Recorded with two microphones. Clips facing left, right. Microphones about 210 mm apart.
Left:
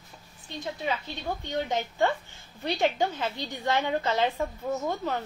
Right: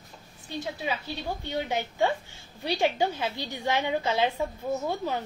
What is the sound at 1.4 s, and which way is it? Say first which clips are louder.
A woman's voice: left 1 dB; 10° right (ahead or behind).